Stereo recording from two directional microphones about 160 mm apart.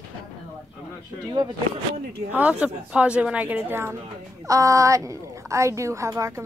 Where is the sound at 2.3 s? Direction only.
10° right (ahead or behind).